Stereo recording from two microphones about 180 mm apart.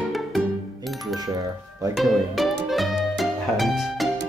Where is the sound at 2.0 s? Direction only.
Centre (ahead or behind).